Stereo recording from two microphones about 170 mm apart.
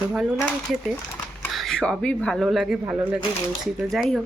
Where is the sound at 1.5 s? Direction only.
Centre (ahead or behind).